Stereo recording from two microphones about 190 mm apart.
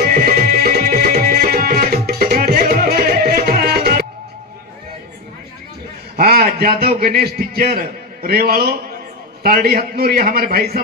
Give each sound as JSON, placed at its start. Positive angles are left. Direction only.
{"t": 0.0, "sound": "music", "side_deg": -50}
{"t": 6.1, "sound": "a man's voice", "side_deg": -55}